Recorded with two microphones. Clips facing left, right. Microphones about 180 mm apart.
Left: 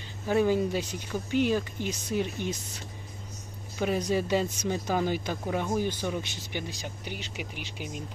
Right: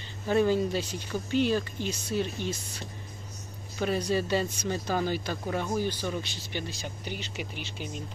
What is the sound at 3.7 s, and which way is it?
Speech, 15° left (ahead or behind).